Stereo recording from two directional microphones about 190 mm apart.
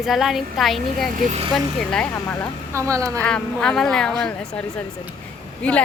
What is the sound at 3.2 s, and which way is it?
Speech, 5° left (ahead or behind).